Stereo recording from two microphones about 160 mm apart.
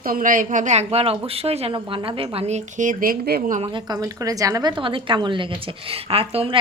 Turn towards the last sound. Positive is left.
turn(degrees=-35)  # may be behind; listen again after turning